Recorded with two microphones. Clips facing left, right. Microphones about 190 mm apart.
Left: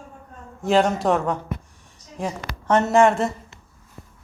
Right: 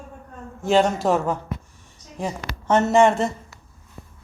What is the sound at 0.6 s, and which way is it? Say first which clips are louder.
A man's voice: even; centre (ahead or behind).